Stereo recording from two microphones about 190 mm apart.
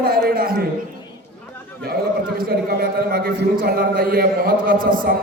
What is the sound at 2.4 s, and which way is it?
A man's voice, 50° right (ahead or behind).